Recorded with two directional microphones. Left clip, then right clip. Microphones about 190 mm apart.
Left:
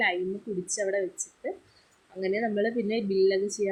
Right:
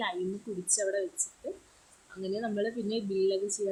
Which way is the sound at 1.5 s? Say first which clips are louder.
Left 7 dB; 5° left (ahead or behind).